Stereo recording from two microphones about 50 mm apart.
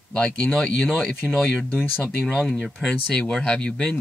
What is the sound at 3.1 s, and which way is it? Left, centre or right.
Speech, centre.